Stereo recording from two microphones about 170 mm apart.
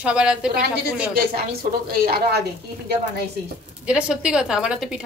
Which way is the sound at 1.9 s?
65° right (ahead or behind).